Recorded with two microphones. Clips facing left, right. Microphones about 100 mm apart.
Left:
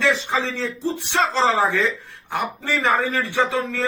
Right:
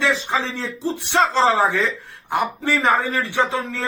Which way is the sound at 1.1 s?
15° right (ahead or behind).